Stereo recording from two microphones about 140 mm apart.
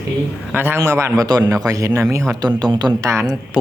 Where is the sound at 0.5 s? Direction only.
15° right (ahead or behind).